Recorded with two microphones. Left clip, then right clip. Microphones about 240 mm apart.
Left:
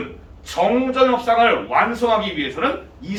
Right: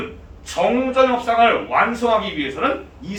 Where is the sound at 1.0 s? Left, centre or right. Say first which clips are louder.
Right 1 dB; centre.